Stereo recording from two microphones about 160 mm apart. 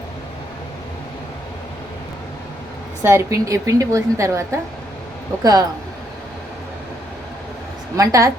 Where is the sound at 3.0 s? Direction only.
15° right (ahead or behind).